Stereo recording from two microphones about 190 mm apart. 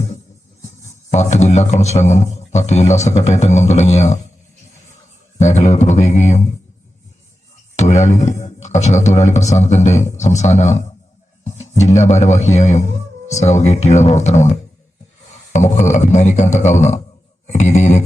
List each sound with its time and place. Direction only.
1.1 s speech: 35° left (ahead or behind)
5.4 s speech: 35° left (ahead or behind)
7.8 s speech: 35° left (ahead or behind)
11.4 s music: 35° left (ahead or behind)
11.8 s speech: 35° left (ahead or behind)
17.4 s guitar: 40° left (ahead or behind)